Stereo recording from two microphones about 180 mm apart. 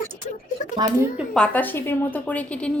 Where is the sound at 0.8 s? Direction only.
25° right (ahead or behind).